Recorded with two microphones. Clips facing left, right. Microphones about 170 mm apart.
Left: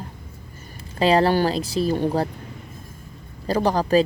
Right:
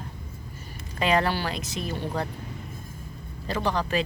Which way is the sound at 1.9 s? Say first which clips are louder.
Left 8 dB; 50° left (ahead or behind).